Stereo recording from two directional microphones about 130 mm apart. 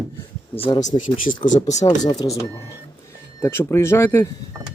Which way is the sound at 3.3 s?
20° left (ahead or behind).